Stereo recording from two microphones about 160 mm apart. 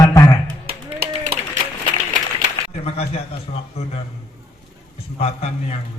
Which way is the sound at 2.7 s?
40° left (ahead or behind).